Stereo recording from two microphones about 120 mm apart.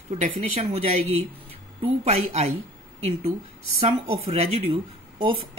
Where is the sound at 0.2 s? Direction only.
60° right (ahead or behind).